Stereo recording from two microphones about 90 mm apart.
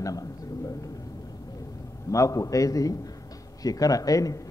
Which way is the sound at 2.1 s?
35° left (ahead or behind).